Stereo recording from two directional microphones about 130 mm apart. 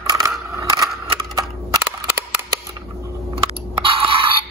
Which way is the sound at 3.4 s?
45° right (ahead or behind).